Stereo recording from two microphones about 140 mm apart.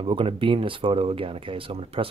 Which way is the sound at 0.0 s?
40° right (ahead or behind).